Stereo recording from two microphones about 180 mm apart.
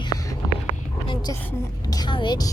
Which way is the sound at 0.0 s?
20° left (ahead or behind).